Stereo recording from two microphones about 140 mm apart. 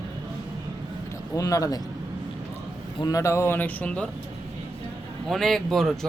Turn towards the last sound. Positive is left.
turn(degrees=0)  # may be behind; listen again after turning